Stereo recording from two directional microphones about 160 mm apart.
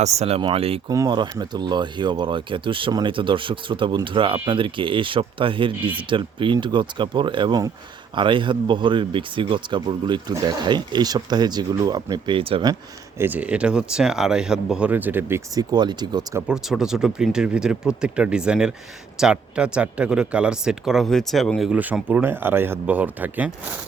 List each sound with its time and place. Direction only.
0.0 s speech: 45° right (ahead or behind)
0.9 s speech: 25° right (ahead or behind)
13.1 s speech: 10° right (ahead or behind)
15.5 s speech: 25° right (ahead or behind)
16.5 s speech: 5° right (ahead or behind)
21.7 s speech: 10° right (ahead or behind)